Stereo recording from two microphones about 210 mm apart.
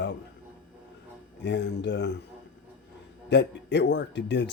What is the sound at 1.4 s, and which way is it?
Speech, 55° left (ahead or behind).